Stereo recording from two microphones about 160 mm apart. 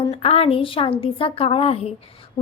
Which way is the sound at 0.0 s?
40° left (ahead or behind).